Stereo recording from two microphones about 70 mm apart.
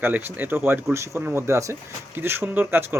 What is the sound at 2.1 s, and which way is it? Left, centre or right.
Speech, right.